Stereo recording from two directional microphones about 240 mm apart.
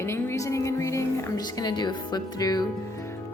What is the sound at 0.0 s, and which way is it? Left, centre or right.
Speech, centre.